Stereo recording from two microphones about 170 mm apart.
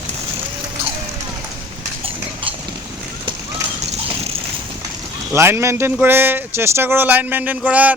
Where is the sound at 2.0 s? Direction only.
30° right (ahead or behind).